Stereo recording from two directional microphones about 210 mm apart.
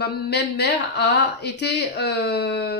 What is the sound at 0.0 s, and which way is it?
Speech, 50° left (ahead or behind).